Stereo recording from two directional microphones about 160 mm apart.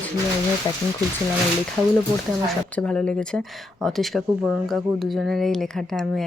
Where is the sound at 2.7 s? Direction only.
5° left (ahead or behind).